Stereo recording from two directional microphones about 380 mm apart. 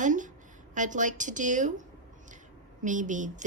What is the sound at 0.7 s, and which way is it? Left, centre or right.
A woman's voice, centre.